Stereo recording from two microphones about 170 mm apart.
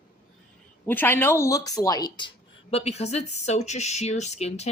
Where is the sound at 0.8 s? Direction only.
10° left (ahead or behind).